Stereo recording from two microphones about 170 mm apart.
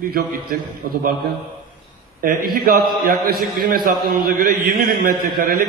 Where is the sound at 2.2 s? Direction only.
60° right (ahead or behind).